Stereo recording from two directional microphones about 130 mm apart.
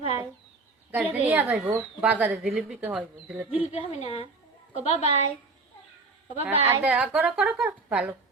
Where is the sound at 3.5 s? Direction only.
50° left (ahead or behind).